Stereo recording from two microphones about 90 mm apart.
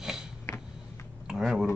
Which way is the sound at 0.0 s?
5° right (ahead or behind).